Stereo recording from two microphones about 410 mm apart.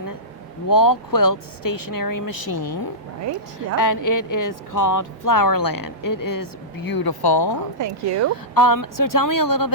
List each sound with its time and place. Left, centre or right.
0.7 s speech: left
3.8 s speech: left
7.8 s speech: right
8.5 s speech: left